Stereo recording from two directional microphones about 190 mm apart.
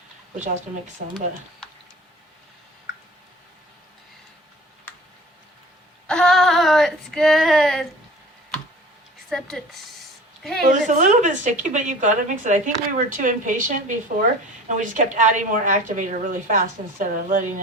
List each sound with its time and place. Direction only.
0.3 s a woman's voice: 40° right (ahead or behind)
6.1 s female singing: 5° left (ahead or behind)
10.7 s a woman's voice: 40° right (ahead or behind)